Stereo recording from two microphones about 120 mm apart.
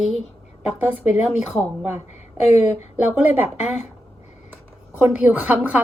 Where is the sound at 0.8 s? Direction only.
15° right (ahead or behind).